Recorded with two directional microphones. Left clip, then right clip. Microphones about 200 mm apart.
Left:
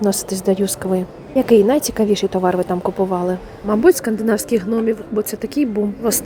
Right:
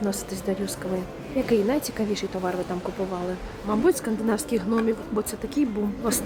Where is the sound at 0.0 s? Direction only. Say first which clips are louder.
Left 10 dB; 30° left (ahead or behind).